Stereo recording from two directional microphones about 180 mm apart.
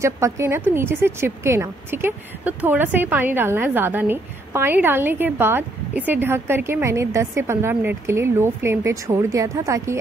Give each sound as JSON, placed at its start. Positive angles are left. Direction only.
{"t": 0.0, "sound": "a woman's voice", "side_deg": -15}